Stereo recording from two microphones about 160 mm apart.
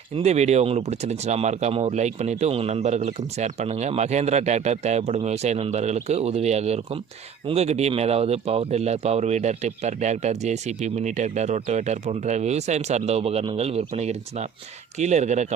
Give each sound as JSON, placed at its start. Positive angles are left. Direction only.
{"t": 0.2, "sound": "speech", "side_deg": -45}